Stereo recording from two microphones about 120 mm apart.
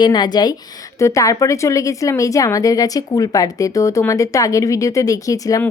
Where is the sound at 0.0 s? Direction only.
35° left (ahead or behind).